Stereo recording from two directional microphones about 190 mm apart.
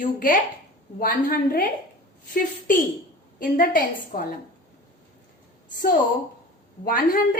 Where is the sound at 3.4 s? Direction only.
45° left (ahead or behind).